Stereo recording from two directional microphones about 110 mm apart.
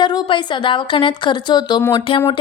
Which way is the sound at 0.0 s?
45° left (ahead or behind).